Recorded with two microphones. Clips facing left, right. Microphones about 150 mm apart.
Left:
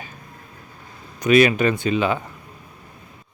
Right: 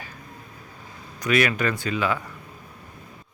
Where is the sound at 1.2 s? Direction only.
20° left (ahead or behind).